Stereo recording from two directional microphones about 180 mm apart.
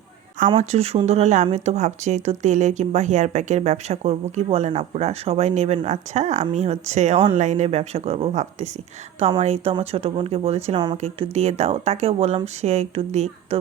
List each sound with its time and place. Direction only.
0.6 s speech: 35° right (ahead or behind)